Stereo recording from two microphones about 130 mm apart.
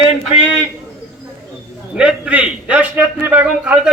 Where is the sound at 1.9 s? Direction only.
10° right (ahead or behind).